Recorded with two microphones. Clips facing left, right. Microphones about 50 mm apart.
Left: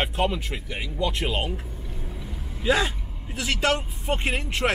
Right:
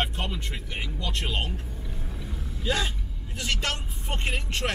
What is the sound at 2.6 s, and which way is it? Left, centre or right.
Speech, centre.